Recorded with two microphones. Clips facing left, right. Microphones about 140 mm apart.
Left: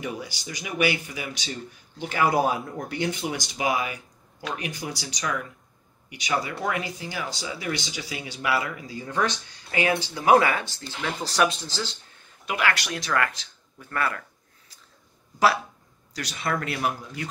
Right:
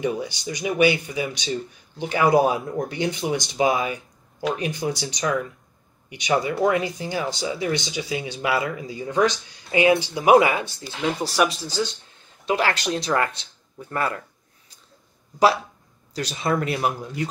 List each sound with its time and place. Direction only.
0.0 s speech: 25° right (ahead or behind)
12.4 s speech: 30° right (ahead or behind)
15.3 s speech: 20° right (ahead or behind)